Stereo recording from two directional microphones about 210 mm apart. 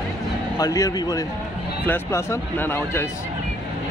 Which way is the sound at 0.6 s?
15° left (ahead or behind).